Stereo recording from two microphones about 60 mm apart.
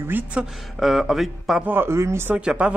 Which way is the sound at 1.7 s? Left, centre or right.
Right.